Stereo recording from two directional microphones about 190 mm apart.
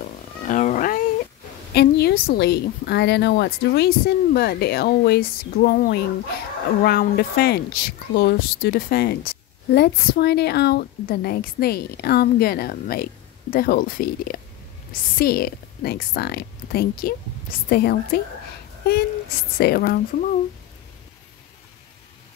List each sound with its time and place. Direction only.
0.5 s cat: 40° left (ahead or behind)
1.7 s a woman's voice: 60° left (ahead or behind)
19.6 s a woman's voice: 50° left (ahead or behind)